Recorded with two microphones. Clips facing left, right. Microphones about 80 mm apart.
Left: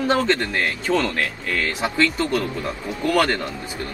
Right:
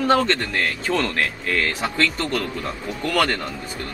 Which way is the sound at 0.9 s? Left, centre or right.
Centre.